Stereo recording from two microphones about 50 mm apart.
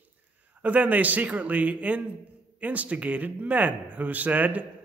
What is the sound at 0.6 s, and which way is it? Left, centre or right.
A man's voice, right.